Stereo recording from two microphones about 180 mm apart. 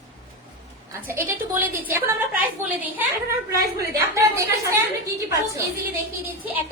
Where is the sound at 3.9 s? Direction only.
15° right (ahead or behind).